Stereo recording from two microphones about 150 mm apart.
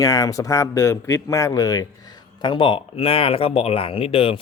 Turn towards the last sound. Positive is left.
turn(degrees=40)  # may be behind; listen again after turning